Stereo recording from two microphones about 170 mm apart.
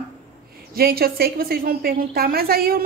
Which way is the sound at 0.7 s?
60° right (ahead or behind).